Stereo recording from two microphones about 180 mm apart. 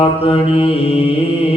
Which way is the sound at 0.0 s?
30° left (ahead or behind).